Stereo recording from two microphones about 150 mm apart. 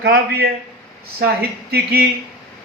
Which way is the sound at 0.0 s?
90° right.